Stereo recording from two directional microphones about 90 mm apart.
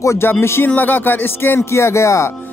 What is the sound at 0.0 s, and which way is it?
Speech, 30° left (ahead or behind).